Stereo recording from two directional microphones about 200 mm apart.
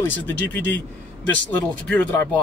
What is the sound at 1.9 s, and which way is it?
Speech, 10° left (ahead or behind).